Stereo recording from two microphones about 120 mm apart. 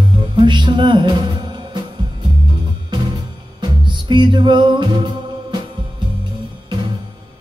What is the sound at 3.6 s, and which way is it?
Music, 40° right (ahead or behind).